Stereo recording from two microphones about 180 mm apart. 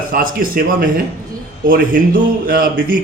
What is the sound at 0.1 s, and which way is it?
A man's voice, 55° right (ahead or behind).